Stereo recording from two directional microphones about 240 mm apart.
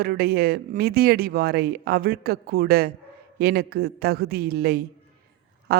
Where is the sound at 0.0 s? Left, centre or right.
Right.